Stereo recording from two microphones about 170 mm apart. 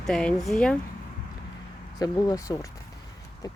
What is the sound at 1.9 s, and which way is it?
Speech, 20° left (ahead or behind).